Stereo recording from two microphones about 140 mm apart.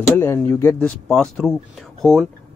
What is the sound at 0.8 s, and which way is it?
Speech, 5° left (ahead or behind).